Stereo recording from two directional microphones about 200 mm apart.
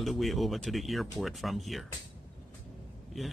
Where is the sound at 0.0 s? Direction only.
Centre (ahead or behind).